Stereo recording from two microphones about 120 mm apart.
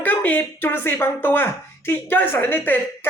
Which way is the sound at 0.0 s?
15° left (ahead or behind).